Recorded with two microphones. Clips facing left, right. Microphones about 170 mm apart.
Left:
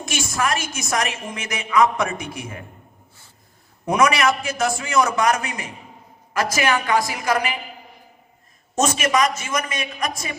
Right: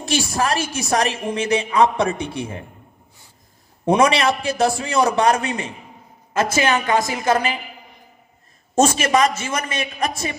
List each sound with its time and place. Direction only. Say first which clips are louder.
0.0 s a woman's voice: right 3 dB; 35° right (ahead or behind)
3.8 s a woman's voice: right 2 dB; 30° right (ahead or behind)
8.7 s a man's voice: right 3 dB; 30° right (ahead or behind)